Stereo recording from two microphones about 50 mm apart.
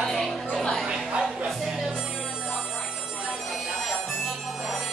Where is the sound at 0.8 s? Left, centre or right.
Centre.